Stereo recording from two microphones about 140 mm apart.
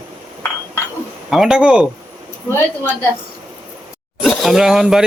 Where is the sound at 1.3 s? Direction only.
5° right (ahead or behind).